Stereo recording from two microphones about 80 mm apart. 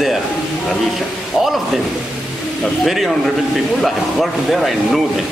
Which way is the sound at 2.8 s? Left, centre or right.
Centre.